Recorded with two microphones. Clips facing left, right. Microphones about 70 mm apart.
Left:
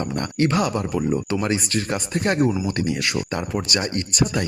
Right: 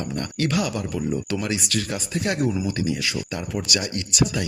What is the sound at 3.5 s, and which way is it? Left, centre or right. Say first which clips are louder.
Speech: left 1 dB; left.